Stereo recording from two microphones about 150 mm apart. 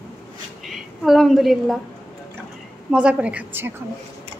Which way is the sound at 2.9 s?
5° right (ahead or behind).